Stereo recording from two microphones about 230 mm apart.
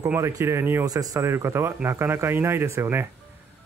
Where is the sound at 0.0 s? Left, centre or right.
Centre.